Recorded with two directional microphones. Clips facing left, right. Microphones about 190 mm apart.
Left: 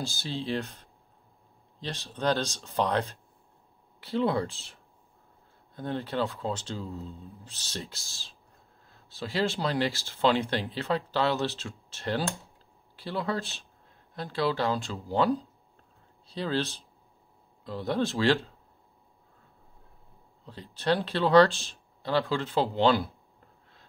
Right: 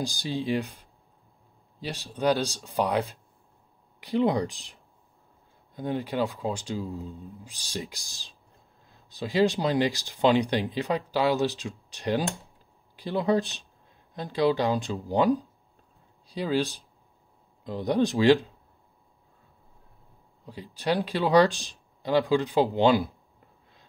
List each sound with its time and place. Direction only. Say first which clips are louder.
0.0 s speech: right 4 dB; 15° right (ahead or behind)
20.4 s speech: even; 15° right (ahead or behind)